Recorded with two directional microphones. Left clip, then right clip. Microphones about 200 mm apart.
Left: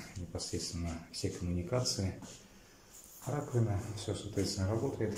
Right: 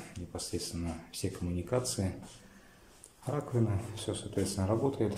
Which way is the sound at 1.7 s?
15° right (ahead or behind).